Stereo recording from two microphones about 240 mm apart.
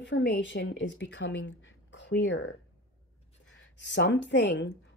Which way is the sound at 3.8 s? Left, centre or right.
Left.